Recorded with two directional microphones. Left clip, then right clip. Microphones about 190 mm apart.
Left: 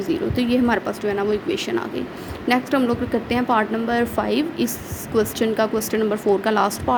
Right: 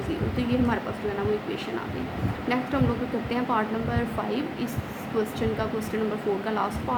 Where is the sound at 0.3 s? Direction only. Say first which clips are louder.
Left 6 dB; 40° left (ahead or behind).